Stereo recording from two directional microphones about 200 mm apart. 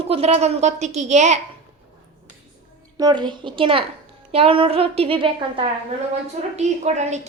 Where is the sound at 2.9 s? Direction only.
20° right (ahead or behind).